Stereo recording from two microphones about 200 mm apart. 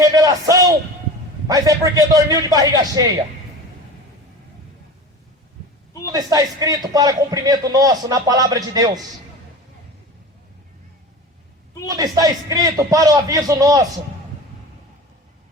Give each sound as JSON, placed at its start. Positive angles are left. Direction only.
{"t": 0.0, "sound": "a sound", "side_deg": -15}
{"t": 1.5, "sound": "a man's voice", "side_deg": -15}
{"t": 6.1, "sound": "a man's voice", "side_deg": -20}
{"t": 11.9, "sound": "a man's voice", "side_deg": -20}